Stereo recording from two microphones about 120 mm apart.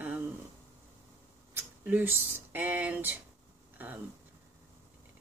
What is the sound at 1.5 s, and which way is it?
Speech, 15° right (ahead or behind).